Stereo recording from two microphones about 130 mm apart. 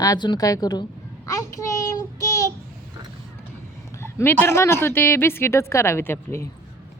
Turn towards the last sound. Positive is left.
turn(degrees=20)  # may be behind; listen again after turning